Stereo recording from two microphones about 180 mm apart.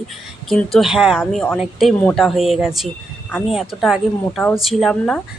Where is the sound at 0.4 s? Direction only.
Centre (ahead or behind).